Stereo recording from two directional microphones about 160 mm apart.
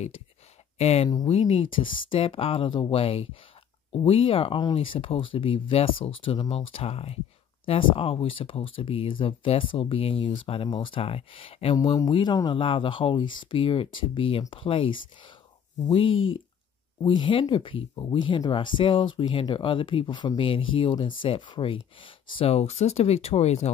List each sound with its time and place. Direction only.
0.7 s speech: 40° left (ahead or behind)